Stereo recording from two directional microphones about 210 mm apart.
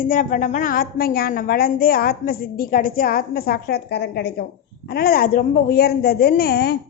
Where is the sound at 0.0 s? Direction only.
40° left (ahead or behind).